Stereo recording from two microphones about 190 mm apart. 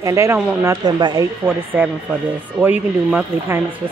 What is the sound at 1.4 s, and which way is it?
A child's voice, 10° right (ahead or behind).